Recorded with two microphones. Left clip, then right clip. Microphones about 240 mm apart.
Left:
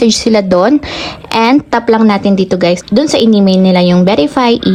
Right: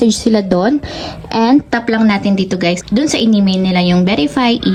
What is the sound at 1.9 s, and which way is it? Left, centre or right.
Speech, centre.